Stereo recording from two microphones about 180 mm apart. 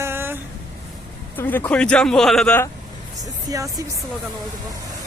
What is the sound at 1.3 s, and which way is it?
Speech, 10° left (ahead or behind).